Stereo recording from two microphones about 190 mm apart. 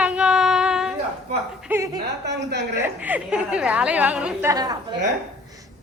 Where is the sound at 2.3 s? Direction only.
65° right (ahead or behind).